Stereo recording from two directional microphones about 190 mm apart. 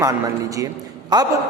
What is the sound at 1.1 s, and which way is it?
Speech, 20° right (ahead or behind).